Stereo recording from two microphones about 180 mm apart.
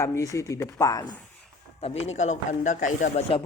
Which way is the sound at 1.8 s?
35° left (ahead or behind).